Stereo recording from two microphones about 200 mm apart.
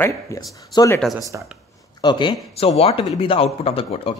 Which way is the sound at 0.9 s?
Centre (ahead or behind).